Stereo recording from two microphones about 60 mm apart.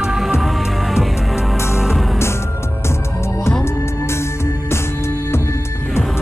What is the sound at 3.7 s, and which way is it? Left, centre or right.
Music, left.